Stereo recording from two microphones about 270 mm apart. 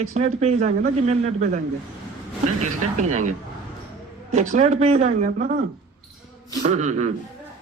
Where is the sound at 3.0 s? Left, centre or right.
Right.